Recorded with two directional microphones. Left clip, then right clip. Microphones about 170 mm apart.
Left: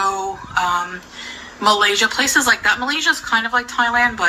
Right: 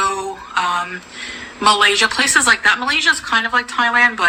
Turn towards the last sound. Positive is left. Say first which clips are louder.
# right 2 dB
turn(degrees=-15)  # may be behind; listen again after turning